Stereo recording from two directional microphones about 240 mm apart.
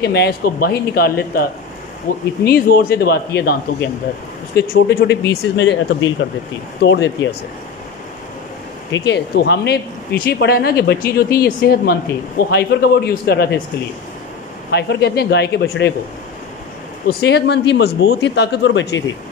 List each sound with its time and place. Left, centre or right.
0.0 s speech: left
8.9 s speech: left
14.7 s speech: left
17.1 s speech: left